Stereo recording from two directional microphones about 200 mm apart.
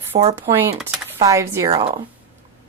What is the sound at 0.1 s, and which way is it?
Speech, 35° right (ahead or behind).